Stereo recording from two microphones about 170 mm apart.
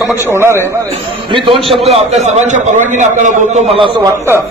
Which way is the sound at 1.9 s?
40° right (ahead or behind).